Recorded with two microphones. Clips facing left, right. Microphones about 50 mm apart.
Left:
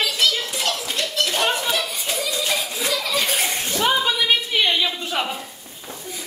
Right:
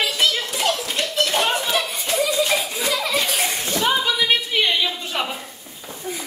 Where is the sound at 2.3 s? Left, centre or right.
Centre.